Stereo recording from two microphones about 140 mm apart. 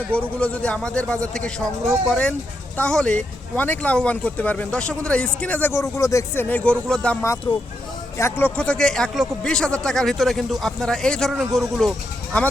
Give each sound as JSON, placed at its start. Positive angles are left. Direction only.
{"t": 0.2, "sound": "speech", "side_deg": 10}
{"t": 7.5, "sound": "speech", "side_deg": 35}
{"t": 8.2, "sound": "speech", "side_deg": 15}